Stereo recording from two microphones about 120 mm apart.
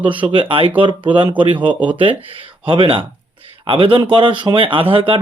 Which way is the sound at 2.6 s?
45° right (ahead or behind).